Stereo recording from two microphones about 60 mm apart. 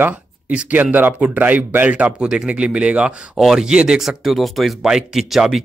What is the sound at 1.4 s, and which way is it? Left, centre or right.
Speech, right.